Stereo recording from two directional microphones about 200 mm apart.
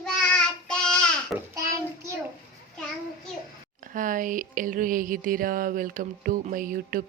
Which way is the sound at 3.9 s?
40° right (ahead or behind).